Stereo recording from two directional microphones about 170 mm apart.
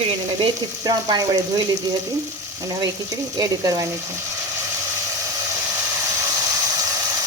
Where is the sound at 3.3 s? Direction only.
20° right (ahead or behind).